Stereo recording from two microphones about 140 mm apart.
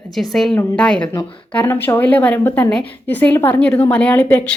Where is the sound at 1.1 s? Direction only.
15° left (ahead or behind).